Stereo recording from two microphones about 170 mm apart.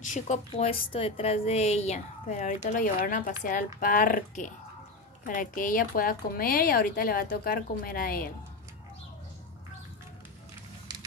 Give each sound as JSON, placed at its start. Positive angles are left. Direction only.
{"t": 0.0, "sound": "a woman's voice", "side_deg": 45}
{"t": 0.5, "sound": "a woman's voice", "side_deg": 35}